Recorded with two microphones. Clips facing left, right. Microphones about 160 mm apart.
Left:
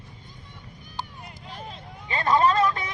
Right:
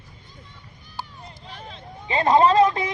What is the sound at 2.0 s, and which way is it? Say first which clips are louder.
Vehicle: right 4 dB; 20° right (ahead or behind).